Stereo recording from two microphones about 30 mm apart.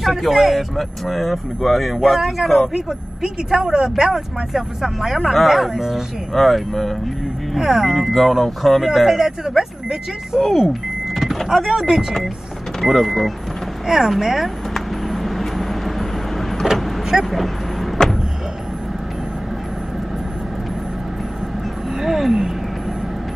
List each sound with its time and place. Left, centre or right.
0.1 s speech: centre
5.3 s speech: centre
6.3 s speech: centre
7.5 s speech: centre
7.8 s speech: centre
8.8 s speech: centre
10.4 s vehicle: centre
11.4 s speech: centre
12.8 s speech: centre
13.8 s speech: centre
14.7 s vehicle: centre
18.0 s a sound: centre
22.0 s speech: centre